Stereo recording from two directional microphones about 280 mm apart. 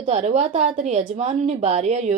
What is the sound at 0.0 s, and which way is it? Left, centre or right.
A woman's voice, right.